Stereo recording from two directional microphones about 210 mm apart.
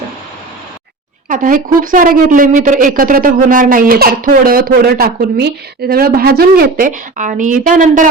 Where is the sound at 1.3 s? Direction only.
40° right (ahead or behind).